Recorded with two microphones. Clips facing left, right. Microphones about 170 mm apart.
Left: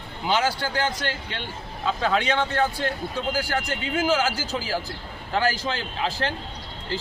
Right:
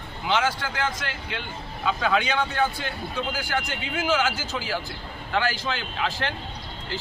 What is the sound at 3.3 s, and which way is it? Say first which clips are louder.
Speech: left 2 dB; 35° left (ahead or behind).